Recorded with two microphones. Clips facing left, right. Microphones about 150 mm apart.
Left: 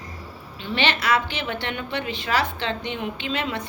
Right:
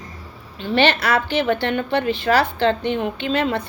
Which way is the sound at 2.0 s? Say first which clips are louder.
Right 8 dB; 55° right (ahead or behind).